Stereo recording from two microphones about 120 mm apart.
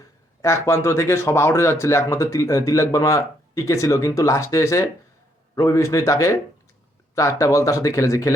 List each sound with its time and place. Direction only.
0.4 s speech: 25° left (ahead or behind)